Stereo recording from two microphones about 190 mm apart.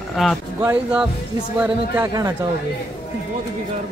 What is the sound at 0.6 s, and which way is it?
A man's voice, 10° right (ahead or behind).